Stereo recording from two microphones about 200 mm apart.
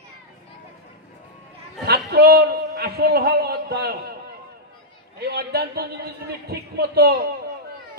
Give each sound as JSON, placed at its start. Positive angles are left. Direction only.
{"t": 2.0, "sound": "a man's voice", "side_deg": -50}
{"t": 5.2, "sound": "a man's voice", "side_deg": -50}